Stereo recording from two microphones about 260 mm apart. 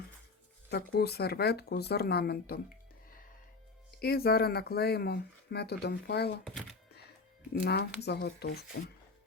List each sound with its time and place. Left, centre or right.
0.7 s speech: left
4.0 s speech: left
7.6 s speech: left